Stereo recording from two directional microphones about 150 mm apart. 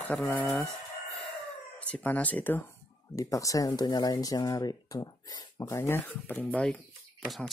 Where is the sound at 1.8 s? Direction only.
10° left (ahead or behind).